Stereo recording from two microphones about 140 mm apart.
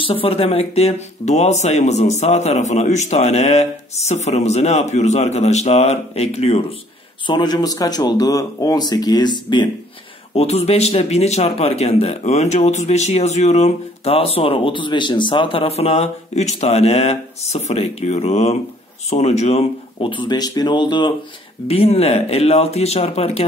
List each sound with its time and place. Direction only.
0.0 s speech: 40° left (ahead or behind)
7.2 s speech: 30° left (ahead or behind)
10.3 s speech: 50° left (ahead or behind); by 21.1 s 35° left (ahead or behind)
21.6 s speech: 45° left (ahead or behind)